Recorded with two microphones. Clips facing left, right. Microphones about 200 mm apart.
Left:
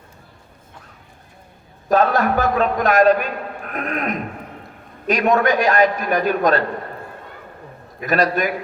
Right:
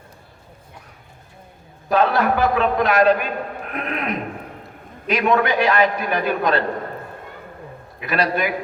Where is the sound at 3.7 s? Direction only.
45° left (ahead or behind).